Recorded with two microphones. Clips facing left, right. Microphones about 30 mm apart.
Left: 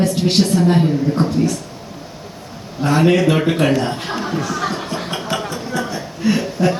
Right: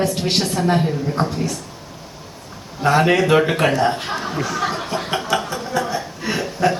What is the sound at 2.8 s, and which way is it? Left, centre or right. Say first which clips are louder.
A man's voice: left 1 dB; centre.